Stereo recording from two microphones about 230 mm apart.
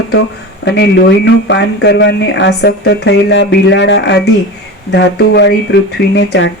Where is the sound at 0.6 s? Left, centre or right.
Left.